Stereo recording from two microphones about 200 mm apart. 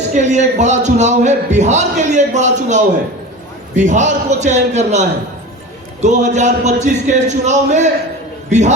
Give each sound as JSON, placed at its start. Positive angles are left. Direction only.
{"t": 0.1, "sound": "a man's voice", "side_deg": -35}